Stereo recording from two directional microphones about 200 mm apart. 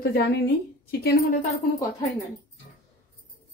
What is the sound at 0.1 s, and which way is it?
Speech, 55° left (ahead or behind).